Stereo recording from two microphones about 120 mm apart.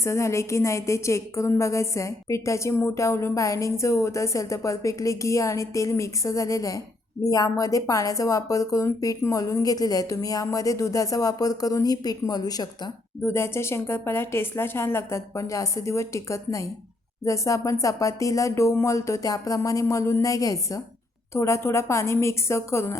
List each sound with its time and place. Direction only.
0.0 s a woman's voice: 25° left (ahead or behind)
13.2 s a woman's voice: 20° left (ahead or behind)